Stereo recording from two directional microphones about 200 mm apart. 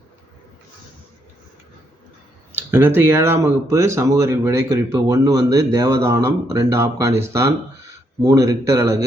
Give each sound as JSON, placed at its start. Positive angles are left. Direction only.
{"t": 2.5, "sound": "speech", "side_deg": -10}